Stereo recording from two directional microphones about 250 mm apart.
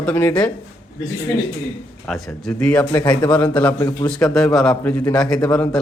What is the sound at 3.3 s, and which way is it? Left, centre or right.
A man's voice, centre.